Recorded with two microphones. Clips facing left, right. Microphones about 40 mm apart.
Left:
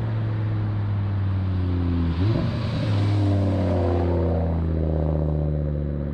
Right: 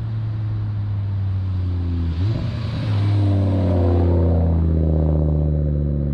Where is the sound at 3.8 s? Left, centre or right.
Left.